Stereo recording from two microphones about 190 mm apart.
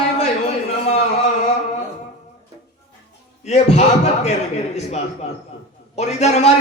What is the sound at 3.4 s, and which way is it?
Speech, 35° left (ahead or behind).